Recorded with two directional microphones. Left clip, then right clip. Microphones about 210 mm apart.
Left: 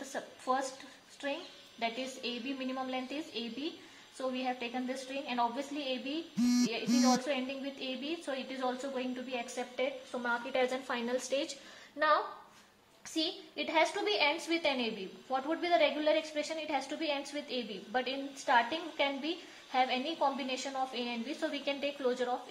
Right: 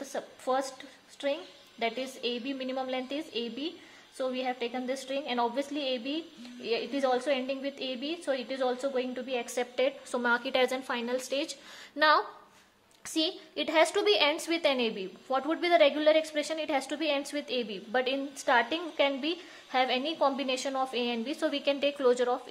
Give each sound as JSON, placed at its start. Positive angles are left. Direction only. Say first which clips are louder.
{"t": 0.1, "sound": "a sound", "louder": "right 3 dB", "side_deg": -40}
{"t": 1.2, "sound": "a woman's voice", "louder": "right 6 dB", "side_deg": -40}
{"t": 7.2, "sound": "a woman's voice", "louder": "right 5 dB", "side_deg": -40}
{"t": 13.1, "sound": "a woman's voice", "louder": "right 5 dB", "side_deg": -45}